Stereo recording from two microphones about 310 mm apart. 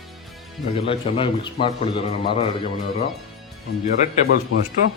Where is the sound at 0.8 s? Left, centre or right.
Centre.